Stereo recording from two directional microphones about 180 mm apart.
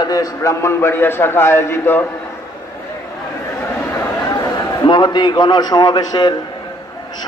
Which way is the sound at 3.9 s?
15° left (ahead or behind).